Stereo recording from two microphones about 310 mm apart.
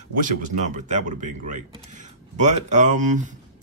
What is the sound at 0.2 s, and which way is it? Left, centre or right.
Speech, right.